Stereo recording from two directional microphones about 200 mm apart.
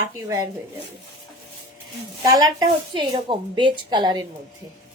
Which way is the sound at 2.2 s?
20° right (ahead or behind).